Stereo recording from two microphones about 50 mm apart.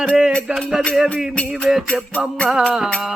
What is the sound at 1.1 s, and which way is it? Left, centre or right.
Music, centre.